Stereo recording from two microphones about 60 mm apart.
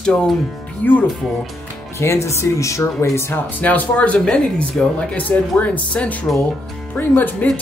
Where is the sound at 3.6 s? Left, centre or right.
Left.